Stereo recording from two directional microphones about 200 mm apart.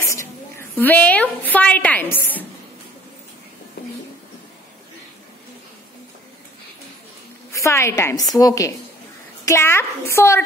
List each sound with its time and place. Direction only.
0.0 s a woman's voice: 15° left (ahead or behind)
3.8 s a sound: 50° left (ahead or behind)
7.5 s a woman's voice: 15° left (ahead or behind)